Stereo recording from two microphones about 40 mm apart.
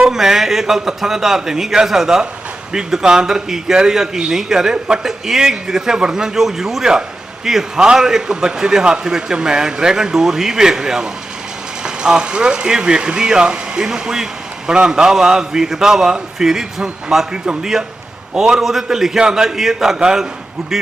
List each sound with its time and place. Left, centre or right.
0.0 s a man's voice: centre